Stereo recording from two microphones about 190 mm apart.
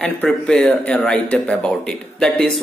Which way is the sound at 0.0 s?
5° left (ahead or behind).